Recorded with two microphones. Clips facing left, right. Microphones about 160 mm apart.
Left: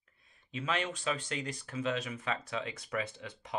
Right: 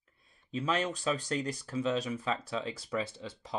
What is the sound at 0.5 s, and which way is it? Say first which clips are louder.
Speech: right 3 dB; 35° right (ahead or behind).